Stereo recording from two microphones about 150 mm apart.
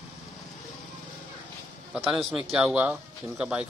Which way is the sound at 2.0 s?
5° right (ahead or behind).